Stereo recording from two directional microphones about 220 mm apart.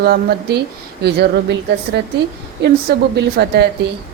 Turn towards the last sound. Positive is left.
turn(degrees=-50)  # may be behind; listen again after turning